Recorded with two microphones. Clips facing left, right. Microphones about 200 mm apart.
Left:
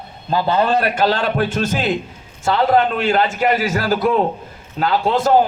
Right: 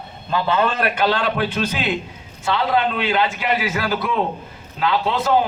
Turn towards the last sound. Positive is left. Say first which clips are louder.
# left 3 dB
turn(degrees=45)  # may be behind; listen again after turning